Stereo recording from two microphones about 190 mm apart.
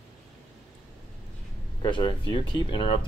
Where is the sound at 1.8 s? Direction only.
25° left (ahead or behind).